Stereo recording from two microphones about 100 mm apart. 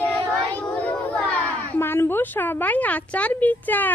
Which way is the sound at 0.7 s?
15° left (ahead or behind).